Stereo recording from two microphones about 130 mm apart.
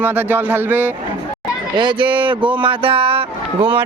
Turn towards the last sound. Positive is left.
turn(degrees=-45)  # may be behind; listen again after turning